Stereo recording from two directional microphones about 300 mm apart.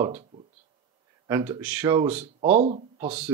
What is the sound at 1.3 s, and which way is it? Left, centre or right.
Speech, centre.